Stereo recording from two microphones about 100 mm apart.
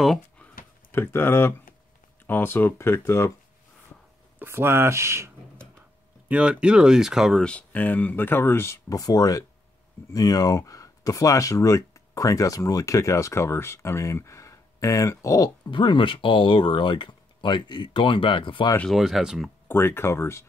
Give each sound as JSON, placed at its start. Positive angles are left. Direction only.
{"t": 0.9, "sound": "speech", "side_deg": 20}
{"t": 4.4, "sound": "speech", "side_deg": -25}
{"t": 6.2, "sound": "speech", "side_deg": -10}
{"t": 7.4, "sound": "speech", "side_deg": 15}
{"t": 15.7, "sound": "speech", "side_deg": 55}
{"t": 18.9, "sound": "speech", "side_deg": 0}
{"t": 19.7, "sound": "speech", "side_deg": 25}